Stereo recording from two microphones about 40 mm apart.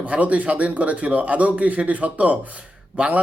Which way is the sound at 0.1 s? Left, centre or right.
Right.